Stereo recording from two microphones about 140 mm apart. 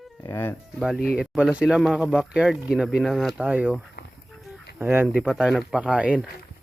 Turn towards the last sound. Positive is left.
turn(degrees=-10)  # may be behind; listen again after turning